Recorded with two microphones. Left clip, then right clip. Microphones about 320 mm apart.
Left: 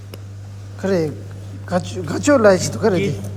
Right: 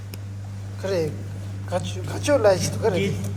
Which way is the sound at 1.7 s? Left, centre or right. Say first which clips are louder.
Left 6 dB; left.